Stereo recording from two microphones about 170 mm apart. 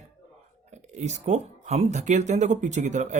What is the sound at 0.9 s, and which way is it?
A man's voice, 45° right (ahead or behind).